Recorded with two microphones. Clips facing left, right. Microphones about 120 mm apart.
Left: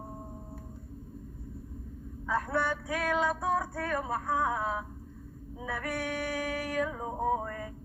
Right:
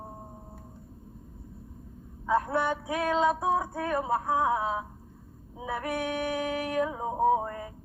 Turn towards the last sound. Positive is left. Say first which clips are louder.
# right 5 dB
turn(degrees=-20)  # may be behind; listen again after turning